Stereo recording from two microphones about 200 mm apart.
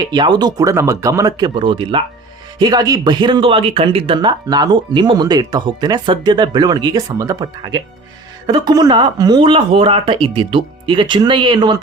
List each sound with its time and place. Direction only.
0.0 s speech: 20° right (ahead or behind)